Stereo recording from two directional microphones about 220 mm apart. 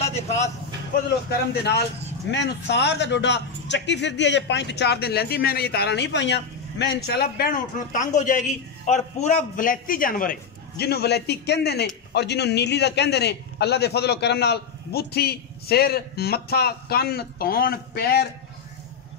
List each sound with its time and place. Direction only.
1.5 s a man's voice: 50° left (ahead or behind)